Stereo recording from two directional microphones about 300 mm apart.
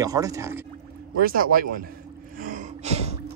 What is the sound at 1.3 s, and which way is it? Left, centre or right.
Speech, right.